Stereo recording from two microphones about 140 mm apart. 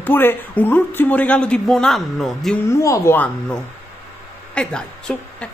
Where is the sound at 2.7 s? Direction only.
20° left (ahead or behind); by 5.4 s 5° left (ahead or behind).